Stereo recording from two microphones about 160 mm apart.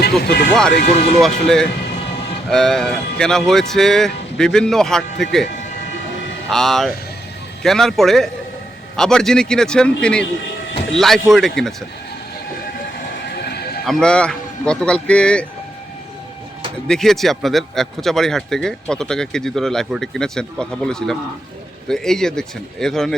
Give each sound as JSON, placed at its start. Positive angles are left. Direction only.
{"t": 0.0, "sound": "speech", "side_deg": 85}
{"t": 1.2, "sound": "a man's voice", "side_deg": 5}
{"t": 6.5, "sound": "a man's voice", "side_deg": 0}
{"t": 13.8, "sound": "a man's voice", "side_deg": 5}
{"t": 16.9, "sound": "a man's voice", "side_deg": 0}